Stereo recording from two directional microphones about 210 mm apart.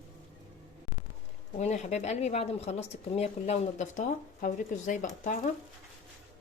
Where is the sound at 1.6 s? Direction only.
35° left (ahead or behind).